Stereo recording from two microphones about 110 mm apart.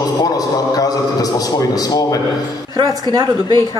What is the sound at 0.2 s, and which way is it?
A man's voice, 35° left (ahead or behind).